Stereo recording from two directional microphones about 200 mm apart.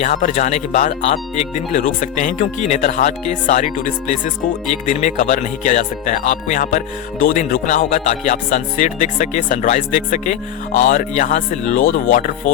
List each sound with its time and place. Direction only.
0.0 s speech: 35° left (ahead or behind)